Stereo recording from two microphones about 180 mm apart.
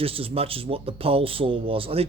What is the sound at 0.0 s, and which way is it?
Speech, 30° right (ahead or behind).